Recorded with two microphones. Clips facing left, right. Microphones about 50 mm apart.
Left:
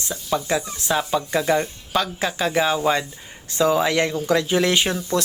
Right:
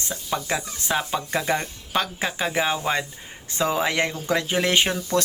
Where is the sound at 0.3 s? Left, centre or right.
Right.